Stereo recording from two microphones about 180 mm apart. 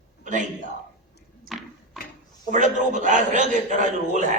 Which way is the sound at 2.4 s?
45° right (ahead or behind).